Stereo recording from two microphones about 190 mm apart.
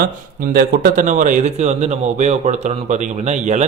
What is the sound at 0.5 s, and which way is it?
A man's voice, 50° right (ahead or behind).